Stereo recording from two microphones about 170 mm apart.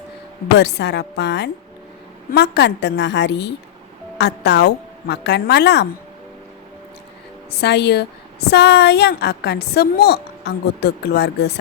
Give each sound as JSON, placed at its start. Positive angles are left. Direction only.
{"t": 0.5, "sound": "a woman's voice", "side_deg": 90}
{"t": 7.6, "sound": "a woman's voice", "side_deg": 80}